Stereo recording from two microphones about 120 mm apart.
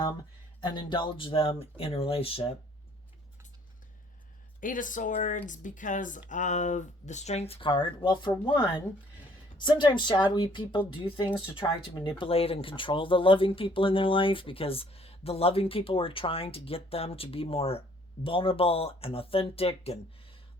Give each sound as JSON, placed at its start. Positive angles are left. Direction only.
{"t": 0.6, "sound": "speech", "side_deg": 40}
{"t": 4.6, "sound": "speech", "side_deg": 90}
{"t": 9.6, "sound": "speech", "side_deg": 40}